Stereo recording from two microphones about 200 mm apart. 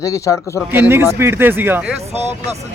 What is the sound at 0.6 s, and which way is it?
Speech, 10° right (ahead or behind).